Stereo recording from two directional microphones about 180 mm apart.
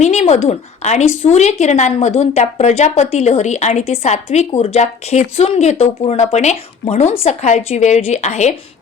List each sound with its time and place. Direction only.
0.0 s a woman's voice: 40° left (ahead or behind)